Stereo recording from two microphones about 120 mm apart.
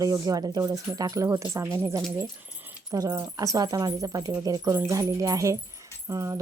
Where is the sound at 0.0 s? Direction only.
30° right (ahead or behind).